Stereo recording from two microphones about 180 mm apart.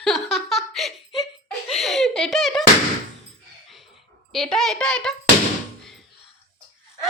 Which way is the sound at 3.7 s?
Centre (ahead or behind).